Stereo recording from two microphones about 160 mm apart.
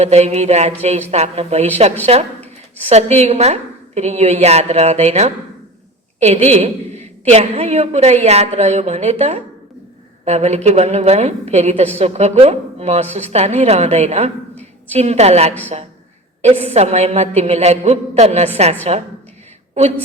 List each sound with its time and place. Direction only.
0.0 s a woman's voice: 45° right (ahead or behind)